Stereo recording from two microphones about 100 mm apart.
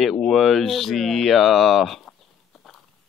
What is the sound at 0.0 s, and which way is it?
Speech, centre (ahead or behind).